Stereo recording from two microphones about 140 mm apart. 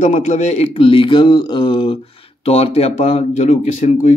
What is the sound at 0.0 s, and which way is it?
Speech, 60° left (ahead or behind).